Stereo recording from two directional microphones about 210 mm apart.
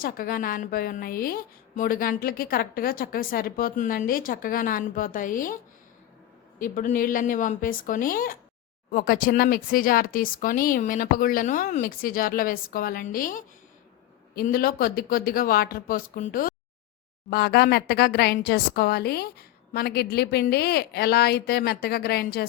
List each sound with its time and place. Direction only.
0.0 s a woman's voice: 45° left (ahead or behind)
6.6 s a woman's voice: 40° left (ahead or behind)